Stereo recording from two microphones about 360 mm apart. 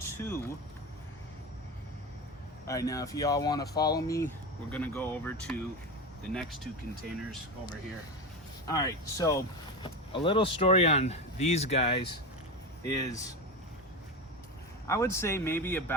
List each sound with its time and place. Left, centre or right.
0.0 s vehicle: centre
2.6 s speech: centre
8.6 s speech: centre
14.8 s speech: centre